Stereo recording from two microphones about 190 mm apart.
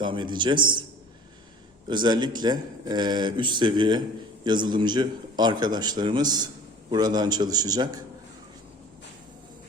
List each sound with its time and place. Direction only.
0.0 s speech: 25° right (ahead or behind)
1.9 s speech: 25° right (ahead or behind)